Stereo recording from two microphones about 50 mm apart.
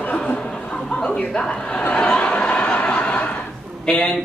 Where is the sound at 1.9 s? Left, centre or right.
Left.